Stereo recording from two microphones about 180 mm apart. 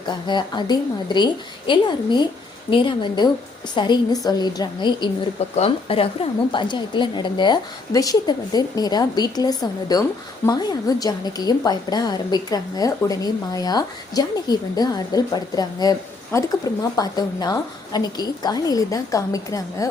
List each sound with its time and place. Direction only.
0.1 s a woman's voice: 25° left (ahead or behind)